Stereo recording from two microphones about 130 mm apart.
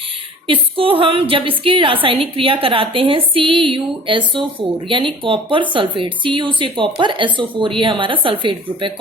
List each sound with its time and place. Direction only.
0.4 s a woman's voice: 45° right (ahead or behind)